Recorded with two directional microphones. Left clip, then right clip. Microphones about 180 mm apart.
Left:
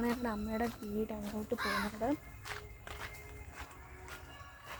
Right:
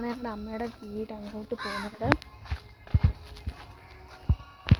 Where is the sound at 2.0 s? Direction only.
50° right (ahead or behind).